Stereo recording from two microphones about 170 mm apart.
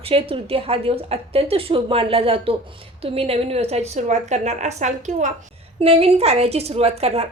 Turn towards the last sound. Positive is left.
turn(degrees=-35)  # may be behind; listen again after turning